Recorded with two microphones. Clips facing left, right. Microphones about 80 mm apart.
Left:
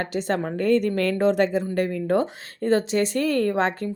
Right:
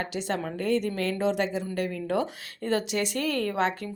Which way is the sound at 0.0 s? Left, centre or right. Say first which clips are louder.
Left 5 dB; left.